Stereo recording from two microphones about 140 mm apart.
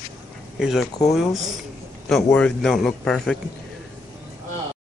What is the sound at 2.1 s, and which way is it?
A man's voice, 5° left (ahead or behind).